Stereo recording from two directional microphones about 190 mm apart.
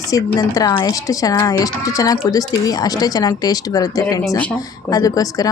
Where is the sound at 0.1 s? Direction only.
20° left (ahead or behind).